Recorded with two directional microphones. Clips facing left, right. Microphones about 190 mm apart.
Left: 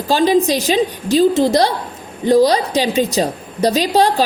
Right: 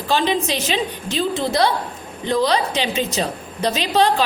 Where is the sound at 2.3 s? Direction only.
40° left (ahead or behind).